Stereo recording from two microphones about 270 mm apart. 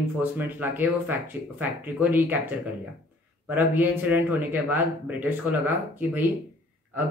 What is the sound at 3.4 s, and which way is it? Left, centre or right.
Speech, centre.